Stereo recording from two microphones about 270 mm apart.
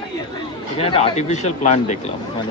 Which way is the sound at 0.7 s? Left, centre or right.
Left.